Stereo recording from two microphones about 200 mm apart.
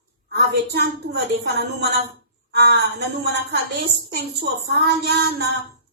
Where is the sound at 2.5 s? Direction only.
55° right (ahead or behind).